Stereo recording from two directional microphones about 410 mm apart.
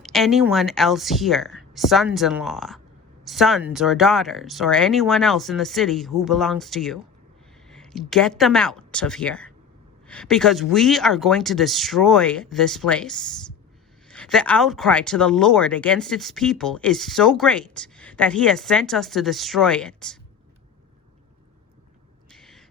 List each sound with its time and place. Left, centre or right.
0.0 s speech: centre
22.3 s owl: centre